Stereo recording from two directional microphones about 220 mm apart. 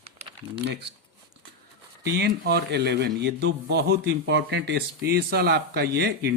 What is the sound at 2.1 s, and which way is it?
A man's voice, 45° right (ahead or behind).